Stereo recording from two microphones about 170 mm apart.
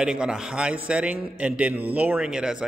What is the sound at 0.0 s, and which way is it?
A man's voice, 5° right (ahead or behind).